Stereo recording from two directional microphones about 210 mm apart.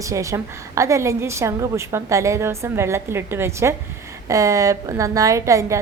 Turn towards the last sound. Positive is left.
turn(degrees=-15)  # may be behind; listen again after turning